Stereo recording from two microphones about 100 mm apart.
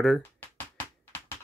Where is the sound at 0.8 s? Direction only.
20° left (ahead or behind).